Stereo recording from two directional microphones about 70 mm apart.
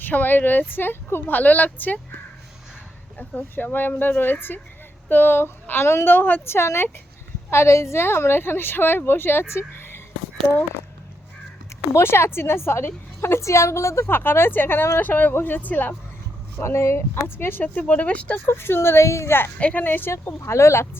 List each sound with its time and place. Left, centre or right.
0.0 s speech: left
3.2 s a woman's voice: left
11.9 s a woman's voice: left
16.6 s a woman's voice: left; by 18.3 s centre
18.4 s a woman's voice: left
19.5 s a woman's voice: left